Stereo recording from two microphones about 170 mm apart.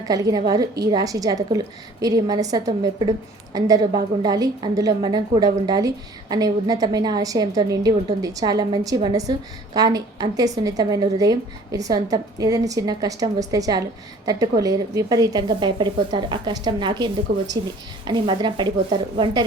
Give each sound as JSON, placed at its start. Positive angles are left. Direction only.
{"t": 0.1, "sound": "a woman's voice", "side_deg": -20}